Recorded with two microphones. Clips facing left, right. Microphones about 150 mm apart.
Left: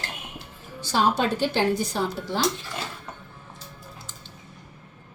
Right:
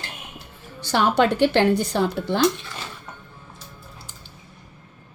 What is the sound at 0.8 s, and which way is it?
Speech, 65° right (ahead or behind).